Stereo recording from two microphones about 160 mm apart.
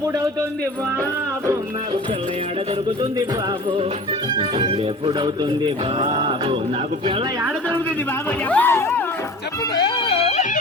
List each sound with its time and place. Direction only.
4.4 s speech: 35° right (ahead or behind)
8.4 s speech: 10° left (ahead or behind)
10.0 s music: 40° left (ahead or behind)